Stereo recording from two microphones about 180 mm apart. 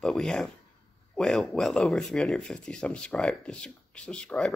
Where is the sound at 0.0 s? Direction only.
Centre (ahead or behind).